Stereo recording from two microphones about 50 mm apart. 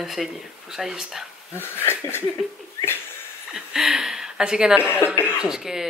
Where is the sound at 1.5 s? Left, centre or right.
Left.